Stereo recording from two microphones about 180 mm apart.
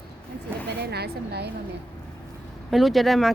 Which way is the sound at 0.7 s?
65° right (ahead or behind).